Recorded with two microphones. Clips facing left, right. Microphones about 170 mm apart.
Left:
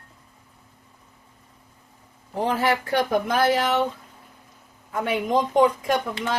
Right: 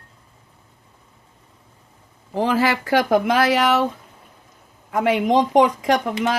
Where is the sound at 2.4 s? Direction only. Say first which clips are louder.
Right 3 dB; 90° right.